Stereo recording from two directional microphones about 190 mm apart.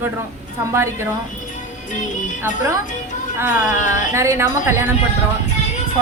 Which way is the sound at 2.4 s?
10° right (ahead or behind).